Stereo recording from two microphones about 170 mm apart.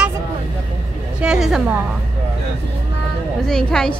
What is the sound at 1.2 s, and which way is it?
Speech, 5° right (ahead or behind).